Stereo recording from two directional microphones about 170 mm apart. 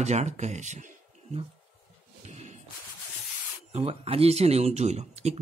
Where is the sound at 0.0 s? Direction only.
40° right (ahead or behind).